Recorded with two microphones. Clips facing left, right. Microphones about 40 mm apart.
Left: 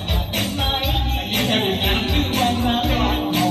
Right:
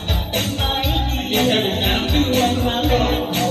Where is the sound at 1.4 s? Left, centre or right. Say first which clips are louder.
Right 2 dB; right.